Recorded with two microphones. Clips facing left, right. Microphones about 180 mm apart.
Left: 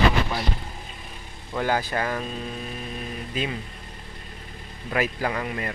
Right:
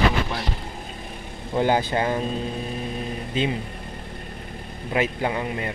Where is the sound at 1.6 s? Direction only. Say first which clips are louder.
Right 4 dB; 25° right (ahead or behind).